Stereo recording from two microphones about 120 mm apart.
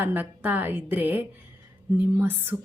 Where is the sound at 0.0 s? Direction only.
15° right (ahead or behind).